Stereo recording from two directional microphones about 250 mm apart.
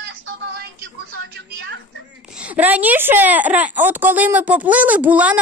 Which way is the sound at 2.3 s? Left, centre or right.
Centre.